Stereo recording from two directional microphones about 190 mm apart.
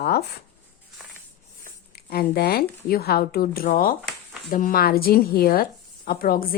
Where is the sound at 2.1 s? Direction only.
55° left (ahead or behind).